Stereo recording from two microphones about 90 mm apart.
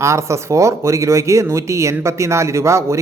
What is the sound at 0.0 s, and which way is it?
Speech, 35° right (ahead or behind).